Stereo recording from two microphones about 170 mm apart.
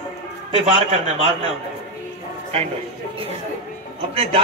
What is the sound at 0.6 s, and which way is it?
Speech, 40° right (ahead or behind).